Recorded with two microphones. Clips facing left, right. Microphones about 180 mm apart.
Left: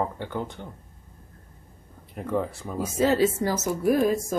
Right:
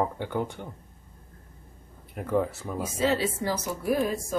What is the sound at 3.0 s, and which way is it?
A woman's voice, 45° left (ahead or behind).